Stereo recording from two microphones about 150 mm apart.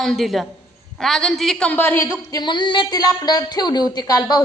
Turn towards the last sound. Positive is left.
turn(degrees=25)  # may be behind; listen again after turning